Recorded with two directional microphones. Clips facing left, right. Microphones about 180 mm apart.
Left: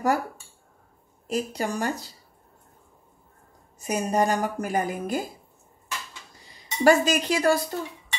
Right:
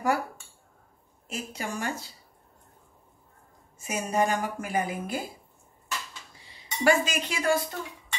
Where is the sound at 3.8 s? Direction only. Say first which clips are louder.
Left 3 dB; 40° left (ahead or behind).